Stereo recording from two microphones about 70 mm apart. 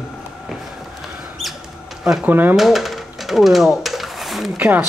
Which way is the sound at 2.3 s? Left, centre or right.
Right.